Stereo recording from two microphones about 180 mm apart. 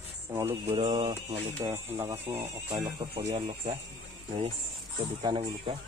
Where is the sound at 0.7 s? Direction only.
25° right (ahead or behind).